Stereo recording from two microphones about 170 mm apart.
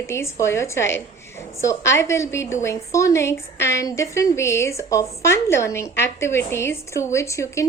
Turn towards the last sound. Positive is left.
turn(degrees=15)  # may be behind; listen again after turning